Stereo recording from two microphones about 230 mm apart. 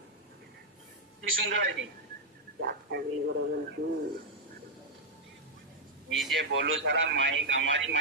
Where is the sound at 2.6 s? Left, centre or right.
Right.